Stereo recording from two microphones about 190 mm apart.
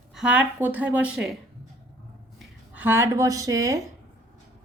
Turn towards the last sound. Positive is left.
turn(degrees=-15)  # may be behind; listen again after turning